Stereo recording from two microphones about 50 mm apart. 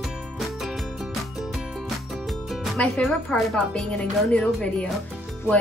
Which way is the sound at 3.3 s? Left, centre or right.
Centre.